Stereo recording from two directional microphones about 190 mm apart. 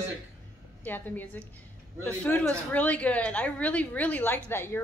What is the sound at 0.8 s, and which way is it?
A woman's voice, 10° left (ahead or behind).